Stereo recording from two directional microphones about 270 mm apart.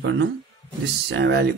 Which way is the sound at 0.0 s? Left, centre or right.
Right.